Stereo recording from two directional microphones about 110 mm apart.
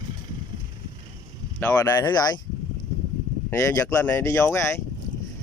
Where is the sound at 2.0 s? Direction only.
40° left (ahead or behind).